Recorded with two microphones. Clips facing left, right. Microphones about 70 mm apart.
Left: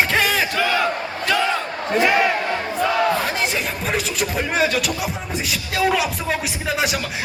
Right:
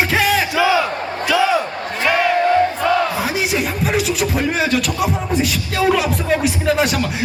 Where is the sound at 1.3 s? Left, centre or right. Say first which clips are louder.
Right 5 dB; centre.